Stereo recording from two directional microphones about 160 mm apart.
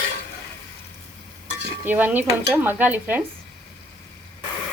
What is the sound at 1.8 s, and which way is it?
Stir, 10° right (ahead or behind).